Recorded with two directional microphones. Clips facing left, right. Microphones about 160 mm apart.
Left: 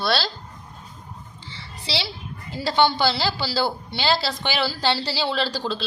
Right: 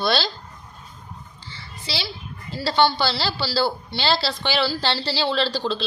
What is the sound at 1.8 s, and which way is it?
A child's voice, 25° left (ahead or behind).